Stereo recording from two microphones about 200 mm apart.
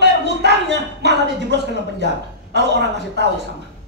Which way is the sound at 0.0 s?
60° right (ahead or behind).